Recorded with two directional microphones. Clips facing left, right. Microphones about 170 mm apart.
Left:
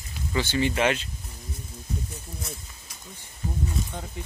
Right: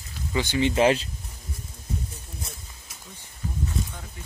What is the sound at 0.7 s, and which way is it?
Speech, 30° right (ahead or behind).